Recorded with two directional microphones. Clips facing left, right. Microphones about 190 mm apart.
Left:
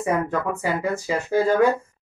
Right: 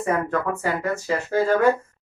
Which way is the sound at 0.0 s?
10° left (ahead or behind).